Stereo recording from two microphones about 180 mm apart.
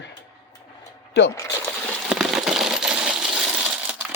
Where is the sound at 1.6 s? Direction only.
Centre (ahead or behind).